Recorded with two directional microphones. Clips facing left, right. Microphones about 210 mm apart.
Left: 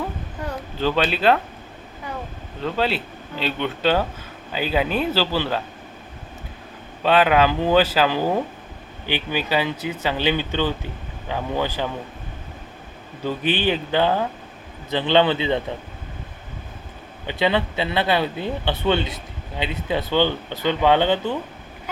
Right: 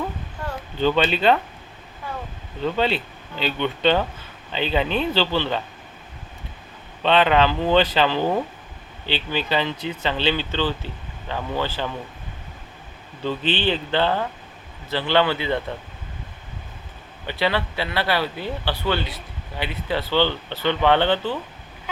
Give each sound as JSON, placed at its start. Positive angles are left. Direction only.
{"t": 0.8, "sound": "speech", "side_deg": 0}
{"t": 2.6, "sound": "speech", "side_deg": 0}
{"t": 7.0, "sound": "speech", "side_deg": 5}
{"t": 13.2, "sound": "speech", "side_deg": 10}
{"t": 17.2, "sound": "speech", "side_deg": 20}